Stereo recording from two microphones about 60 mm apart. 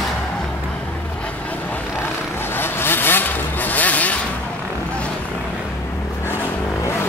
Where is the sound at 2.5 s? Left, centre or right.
Left.